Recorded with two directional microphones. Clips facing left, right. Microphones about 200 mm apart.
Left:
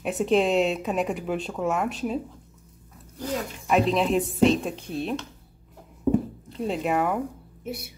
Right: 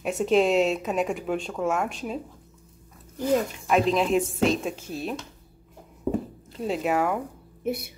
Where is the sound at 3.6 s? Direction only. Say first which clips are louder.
Left 1 dB; centre (ahead or behind).